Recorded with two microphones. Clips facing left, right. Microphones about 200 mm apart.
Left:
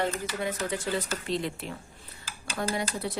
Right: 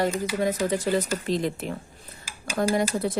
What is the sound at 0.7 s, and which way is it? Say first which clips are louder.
Speech: right 6 dB; 40° right (ahead or behind).